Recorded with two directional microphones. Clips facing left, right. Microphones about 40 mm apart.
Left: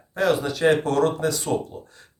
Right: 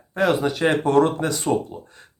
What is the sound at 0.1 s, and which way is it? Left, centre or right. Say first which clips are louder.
Speech: right 2 dB; right.